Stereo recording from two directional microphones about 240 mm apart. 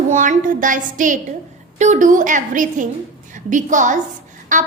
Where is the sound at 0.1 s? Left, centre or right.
Right.